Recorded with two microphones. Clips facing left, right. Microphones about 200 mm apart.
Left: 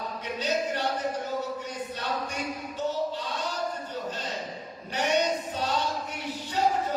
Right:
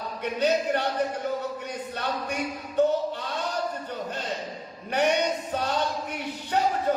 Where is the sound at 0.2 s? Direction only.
60° right (ahead or behind).